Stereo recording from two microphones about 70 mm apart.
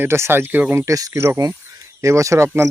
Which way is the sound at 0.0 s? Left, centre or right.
Right.